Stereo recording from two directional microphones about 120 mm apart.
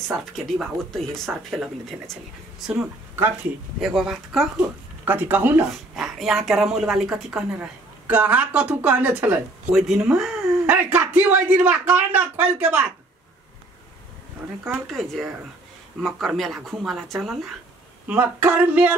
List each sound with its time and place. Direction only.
0.2 s a woman's voice: centre (ahead or behind)
2.6 s a woman's voice: 10° right (ahead or behind)
4.6 s speech: 15° right (ahead or behind)
5.7 s a woman's voice: centre (ahead or behind)
9.7 s speech: centre (ahead or behind)
14.9 s a woman's voice: centre (ahead or behind)
18.0 s speech: 15° right (ahead or behind)